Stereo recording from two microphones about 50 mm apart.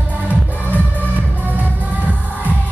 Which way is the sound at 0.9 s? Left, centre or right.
Right.